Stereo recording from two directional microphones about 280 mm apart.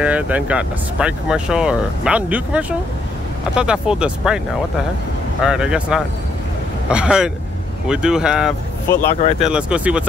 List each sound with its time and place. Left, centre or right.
0.0 s speech: centre
5.4 s speech: centre
8.8 s speech: centre
9.4 s speech: centre